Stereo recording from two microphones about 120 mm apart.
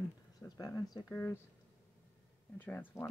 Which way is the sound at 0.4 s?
25° left (ahead or behind).